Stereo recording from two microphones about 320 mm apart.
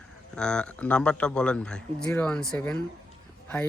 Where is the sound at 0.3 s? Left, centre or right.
Centre.